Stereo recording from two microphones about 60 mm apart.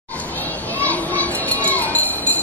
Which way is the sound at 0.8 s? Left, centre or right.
Left.